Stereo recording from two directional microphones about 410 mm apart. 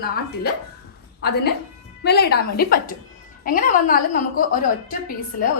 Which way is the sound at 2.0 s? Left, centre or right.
Left.